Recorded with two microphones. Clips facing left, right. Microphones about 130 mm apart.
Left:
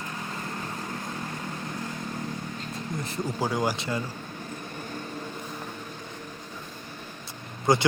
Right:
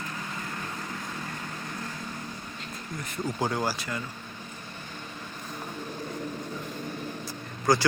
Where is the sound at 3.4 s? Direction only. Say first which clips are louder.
Left 2 dB; 10° left (ahead or behind).